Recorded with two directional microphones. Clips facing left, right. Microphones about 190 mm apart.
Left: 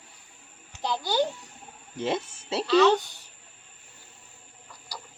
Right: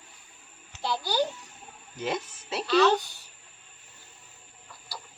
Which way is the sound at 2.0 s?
30° left (ahead or behind).